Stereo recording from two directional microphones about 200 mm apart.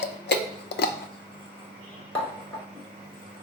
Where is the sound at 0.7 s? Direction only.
55° left (ahead or behind).